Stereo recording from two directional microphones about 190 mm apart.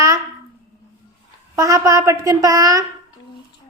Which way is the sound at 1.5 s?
15° right (ahead or behind).